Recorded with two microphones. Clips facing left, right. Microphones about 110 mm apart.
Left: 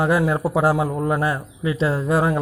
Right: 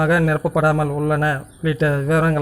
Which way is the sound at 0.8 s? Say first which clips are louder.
Right 2 dB; 15° left (ahead or behind).